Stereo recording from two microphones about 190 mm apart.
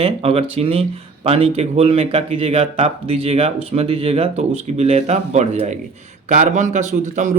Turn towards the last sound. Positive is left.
turn(degrees=-40)  # may be behind; listen again after turning